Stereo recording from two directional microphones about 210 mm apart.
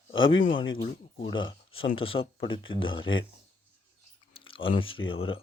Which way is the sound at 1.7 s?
70° left (ahead or behind).